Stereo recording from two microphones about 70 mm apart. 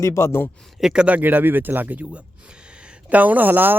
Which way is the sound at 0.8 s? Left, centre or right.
Centre.